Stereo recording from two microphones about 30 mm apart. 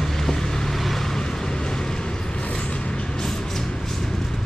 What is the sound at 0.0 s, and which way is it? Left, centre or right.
Vehicle, centre.